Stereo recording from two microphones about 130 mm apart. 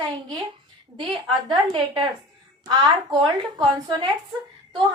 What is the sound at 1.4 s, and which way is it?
A woman's voice, 40° right (ahead or behind).